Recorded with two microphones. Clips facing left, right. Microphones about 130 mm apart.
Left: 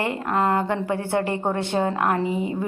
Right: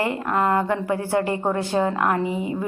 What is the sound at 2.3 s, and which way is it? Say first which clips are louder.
Speech: left 1 dB; 25° right (ahead or behind).